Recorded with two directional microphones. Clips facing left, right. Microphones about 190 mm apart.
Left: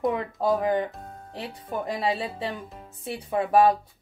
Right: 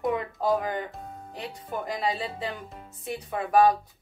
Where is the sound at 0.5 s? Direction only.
25° left (ahead or behind).